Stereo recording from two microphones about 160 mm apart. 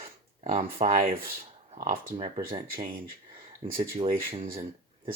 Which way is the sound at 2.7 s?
65° right (ahead or behind).